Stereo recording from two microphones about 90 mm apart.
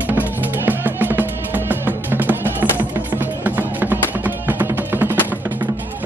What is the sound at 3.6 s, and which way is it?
Music, 20° right (ahead or behind).